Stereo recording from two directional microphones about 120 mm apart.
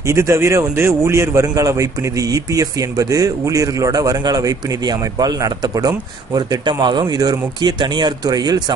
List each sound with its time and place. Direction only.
0.0 s a man's voice: 25° right (ahead or behind)